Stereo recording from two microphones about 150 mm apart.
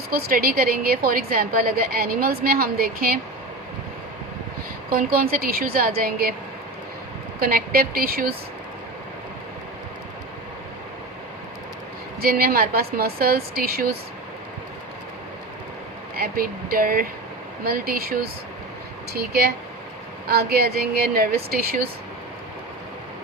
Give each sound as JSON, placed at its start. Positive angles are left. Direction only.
{"t": 0.1, "sound": "a woman's voice", "side_deg": -75}
{"t": 4.9, "sound": "a woman's voice", "side_deg": -75}
{"t": 6.0, "sound": "a woman's voice", "side_deg": -90}
{"t": 7.3, "sound": "a woman's voice", "side_deg": -80}
{"t": 12.2, "sound": "a woman's voice", "side_deg": -80}
{"t": 16.1, "sound": "a woman's voice", "side_deg": -85}
{"t": 17.6, "sound": "a woman's voice", "side_deg": -85}